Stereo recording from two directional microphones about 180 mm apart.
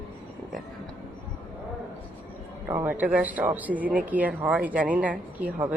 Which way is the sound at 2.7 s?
10° right (ahead or behind).